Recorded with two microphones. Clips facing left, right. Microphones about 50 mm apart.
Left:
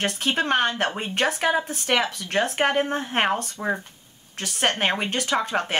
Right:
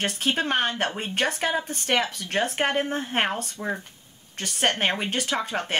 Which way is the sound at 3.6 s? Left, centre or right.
Centre.